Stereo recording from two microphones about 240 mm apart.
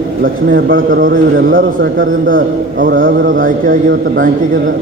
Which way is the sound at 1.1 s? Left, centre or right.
Right.